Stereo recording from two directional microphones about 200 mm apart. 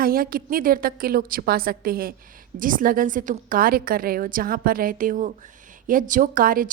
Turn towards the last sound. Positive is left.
turn(degrees=-45)  # may be behind; listen again after turning